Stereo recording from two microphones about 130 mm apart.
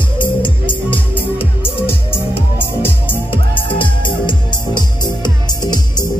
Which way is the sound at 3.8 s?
35° left (ahead or behind).